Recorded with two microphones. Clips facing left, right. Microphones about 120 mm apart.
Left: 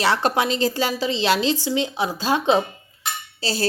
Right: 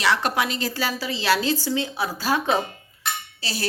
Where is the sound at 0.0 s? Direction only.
30° left (ahead or behind).